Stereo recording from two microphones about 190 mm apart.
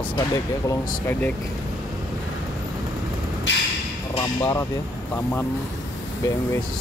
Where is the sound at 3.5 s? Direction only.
70° left (ahead or behind).